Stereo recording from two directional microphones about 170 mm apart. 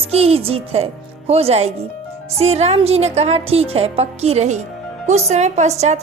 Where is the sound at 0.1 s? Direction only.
35° right (ahead or behind).